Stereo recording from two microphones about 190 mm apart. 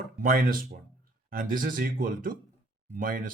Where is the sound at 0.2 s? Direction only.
50° right (ahead or behind).